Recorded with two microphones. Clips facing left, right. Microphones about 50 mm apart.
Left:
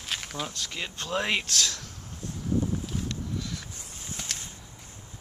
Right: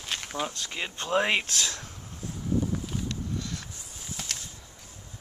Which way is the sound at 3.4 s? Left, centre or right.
Centre.